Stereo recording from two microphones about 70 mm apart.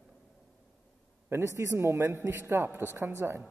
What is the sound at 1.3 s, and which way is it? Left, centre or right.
A man's voice, right.